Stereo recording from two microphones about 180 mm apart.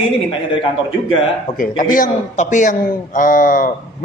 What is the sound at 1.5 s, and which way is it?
A man's voice, 50° left (ahead or behind).